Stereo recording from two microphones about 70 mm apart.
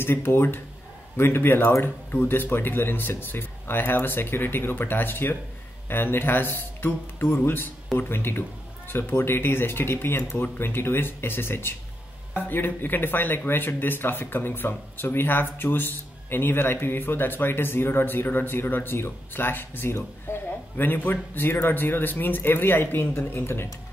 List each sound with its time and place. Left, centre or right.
0.0 s speech: left